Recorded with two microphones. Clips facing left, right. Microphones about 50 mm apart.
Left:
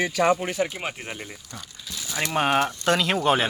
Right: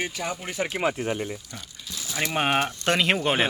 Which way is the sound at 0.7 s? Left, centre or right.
Right.